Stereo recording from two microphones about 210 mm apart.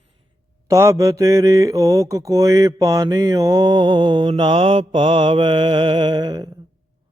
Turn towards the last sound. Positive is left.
turn(degrees=-20)  # may be behind; listen again after turning